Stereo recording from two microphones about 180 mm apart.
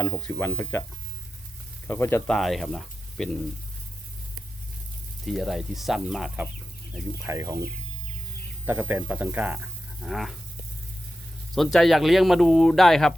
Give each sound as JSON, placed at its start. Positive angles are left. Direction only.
{"t": 0.0, "sound": "speech", "side_deg": 10}
{"t": 1.9, "sound": "speech", "side_deg": 15}
{"t": 2.3, "sound": "speech", "side_deg": 0}
{"t": 5.2, "sound": "speech", "side_deg": 0}
{"t": 8.6, "sound": "speech", "side_deg": -10}
{"t": 11.5, "sound": "speech", "side_deg": 0}